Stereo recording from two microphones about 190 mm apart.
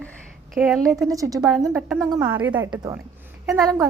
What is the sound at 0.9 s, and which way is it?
Speech, 20° right (ahead or behind).